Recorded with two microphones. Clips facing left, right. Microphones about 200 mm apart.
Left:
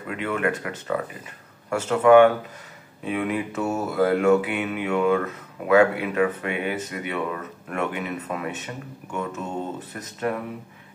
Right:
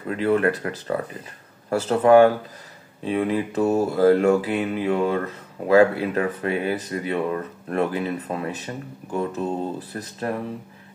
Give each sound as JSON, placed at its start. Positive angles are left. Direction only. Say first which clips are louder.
{"t": 0.1, "sound": "mantra", "louder": "right 5 dB", "side_deg": -35}